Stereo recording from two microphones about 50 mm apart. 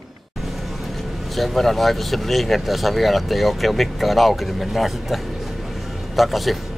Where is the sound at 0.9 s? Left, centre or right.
Centre.